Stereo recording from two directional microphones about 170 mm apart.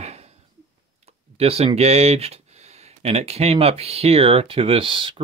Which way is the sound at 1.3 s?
35° right (ahead or behind).